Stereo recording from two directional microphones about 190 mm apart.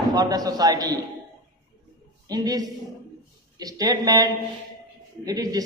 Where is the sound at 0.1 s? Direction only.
20° right (ahead or behind).